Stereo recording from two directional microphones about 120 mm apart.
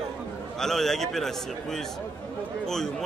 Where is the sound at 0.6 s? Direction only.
5° left (ahead or behind).